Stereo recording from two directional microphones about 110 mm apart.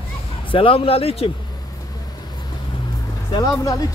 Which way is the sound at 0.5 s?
55° left (ahead or behind).